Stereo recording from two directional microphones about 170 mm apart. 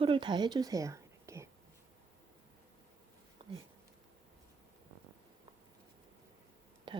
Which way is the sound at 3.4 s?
30° right (ahead or behind).